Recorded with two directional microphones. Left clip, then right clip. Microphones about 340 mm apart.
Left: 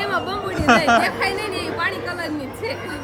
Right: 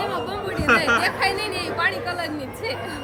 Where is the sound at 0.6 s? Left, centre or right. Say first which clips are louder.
Left 3 dB; centre.